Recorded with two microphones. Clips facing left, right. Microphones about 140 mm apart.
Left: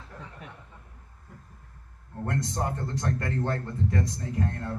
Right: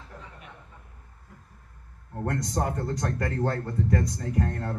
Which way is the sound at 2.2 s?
40° right (ahead or behind).